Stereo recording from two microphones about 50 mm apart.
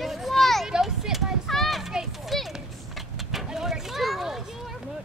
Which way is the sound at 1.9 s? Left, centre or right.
Centre.